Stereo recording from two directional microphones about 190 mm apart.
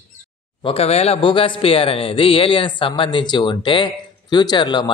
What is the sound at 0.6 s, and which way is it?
A man's voice, 30° left (ahead or behind).